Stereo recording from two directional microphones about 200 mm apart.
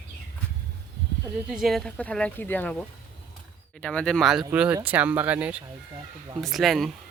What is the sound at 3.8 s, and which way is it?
Speech, 5° left (ahead or behind).